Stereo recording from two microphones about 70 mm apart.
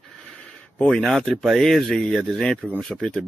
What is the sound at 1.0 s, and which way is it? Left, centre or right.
Speech, centre.